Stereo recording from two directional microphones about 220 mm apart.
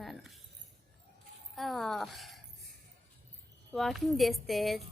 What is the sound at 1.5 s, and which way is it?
Speech, centre (ahead or behind).